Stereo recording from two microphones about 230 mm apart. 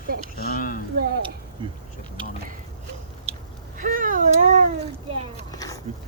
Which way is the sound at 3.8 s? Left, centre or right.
Right.